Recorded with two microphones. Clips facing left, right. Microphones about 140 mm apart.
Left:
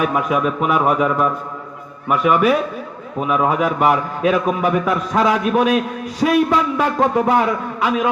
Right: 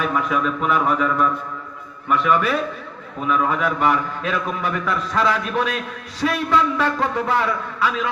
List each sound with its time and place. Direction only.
0.0 s a man's voice: 15° left (ahead or behind)